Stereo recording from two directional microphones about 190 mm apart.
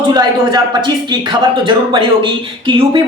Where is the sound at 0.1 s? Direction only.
20° right (ahead or behind).